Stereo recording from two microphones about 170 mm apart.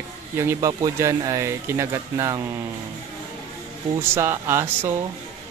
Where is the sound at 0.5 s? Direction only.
20° right (ahead or behind).